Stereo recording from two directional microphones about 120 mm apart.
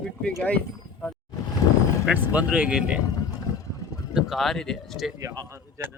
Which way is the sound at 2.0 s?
15° right (ahead or behind).